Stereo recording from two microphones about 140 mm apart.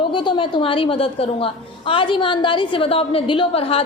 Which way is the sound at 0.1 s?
35° left (ahead or behind).